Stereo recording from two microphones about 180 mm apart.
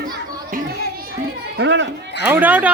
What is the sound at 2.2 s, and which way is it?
Speech, 10° right (ahead or behind).